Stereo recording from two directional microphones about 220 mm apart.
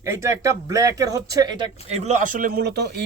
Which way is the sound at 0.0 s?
15° right (ahead or behind).